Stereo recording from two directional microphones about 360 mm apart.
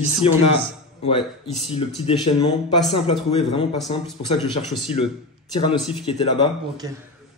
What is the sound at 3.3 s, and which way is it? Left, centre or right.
Speech, centre.